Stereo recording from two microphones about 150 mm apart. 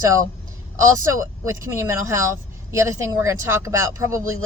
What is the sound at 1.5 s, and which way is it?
Speech, 20° right (ahead or behind).